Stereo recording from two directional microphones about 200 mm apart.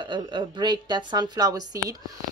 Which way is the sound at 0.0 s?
25° right (ahead or behind).